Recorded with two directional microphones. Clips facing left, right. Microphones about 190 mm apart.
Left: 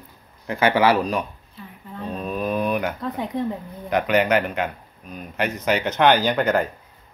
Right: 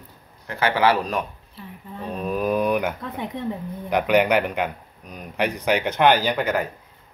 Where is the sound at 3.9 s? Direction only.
10° right (ahead or behind).